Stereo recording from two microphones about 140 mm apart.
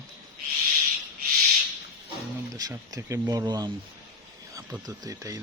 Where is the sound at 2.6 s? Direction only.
25° right (ahead or behind).